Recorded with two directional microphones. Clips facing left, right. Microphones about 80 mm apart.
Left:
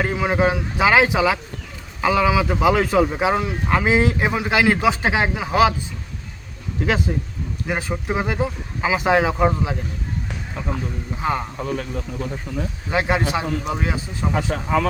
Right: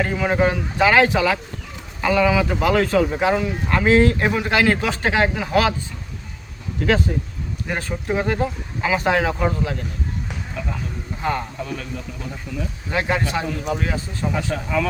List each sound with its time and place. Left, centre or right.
0.0 s speech: centre
7.7 s speech: centre
11.2 s speech: centre
12.9 s speech: centre
14.5 s speech: left